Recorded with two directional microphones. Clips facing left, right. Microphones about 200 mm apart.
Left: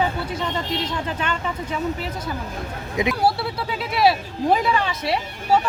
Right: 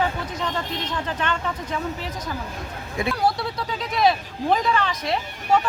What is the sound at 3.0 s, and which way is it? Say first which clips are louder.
Speech: left 3 dB; 20° left (ahead or behind).